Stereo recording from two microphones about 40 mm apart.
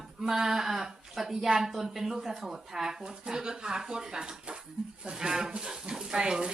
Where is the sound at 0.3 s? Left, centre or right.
Centre.